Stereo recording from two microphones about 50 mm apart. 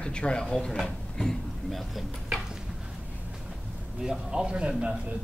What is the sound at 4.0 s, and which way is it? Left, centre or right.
Speech, centre.